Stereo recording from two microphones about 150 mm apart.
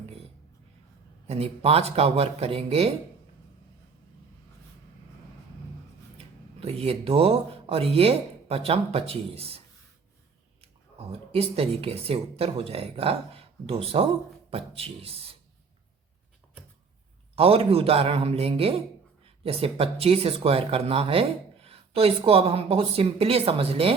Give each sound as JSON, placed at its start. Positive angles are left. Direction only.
{"t": 1.3, "sound": "speech", "side_deg": -40}
{"t": 6.1, "sound": "speech", "side_deg": -40}
{"t": 11.3, "sound": "speech", "side_deg": -40}
{"t": 17.3, "sound": "speech", "side_deg": -40}